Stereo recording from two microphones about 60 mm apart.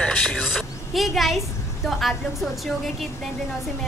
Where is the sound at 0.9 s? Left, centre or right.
Centre.